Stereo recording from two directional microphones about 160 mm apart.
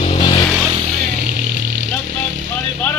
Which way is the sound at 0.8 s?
55° right (ahead or behind).